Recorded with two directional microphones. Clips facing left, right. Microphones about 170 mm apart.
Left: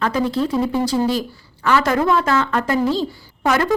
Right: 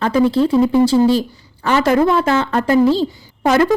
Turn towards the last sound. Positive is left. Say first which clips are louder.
# right 5 dB
turn(degrees=-30)  # may be behind; listen again after turning